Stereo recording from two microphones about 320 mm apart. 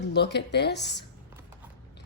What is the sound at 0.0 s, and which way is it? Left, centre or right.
Speech, left.